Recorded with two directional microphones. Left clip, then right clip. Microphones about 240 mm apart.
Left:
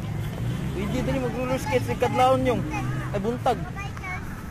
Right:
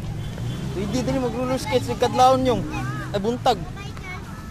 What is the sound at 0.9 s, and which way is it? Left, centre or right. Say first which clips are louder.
Speech: right 3 dB; right.